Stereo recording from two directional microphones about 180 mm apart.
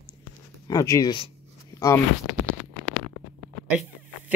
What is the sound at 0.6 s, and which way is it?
Speech, 20° left (ahead or behind).